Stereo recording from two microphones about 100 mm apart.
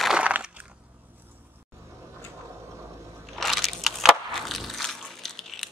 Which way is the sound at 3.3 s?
Centre (ahead or behind).